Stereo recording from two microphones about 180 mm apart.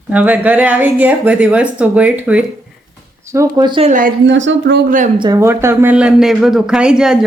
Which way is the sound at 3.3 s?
20° right (ahead or behind).